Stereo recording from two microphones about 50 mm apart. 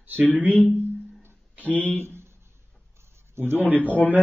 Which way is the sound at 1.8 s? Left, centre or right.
Left.